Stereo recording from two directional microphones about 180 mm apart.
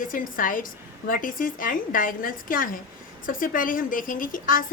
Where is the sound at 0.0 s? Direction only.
50° left (ahead or behind).